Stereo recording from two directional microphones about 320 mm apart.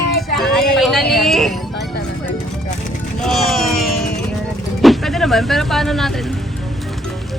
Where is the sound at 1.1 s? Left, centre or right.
Centre.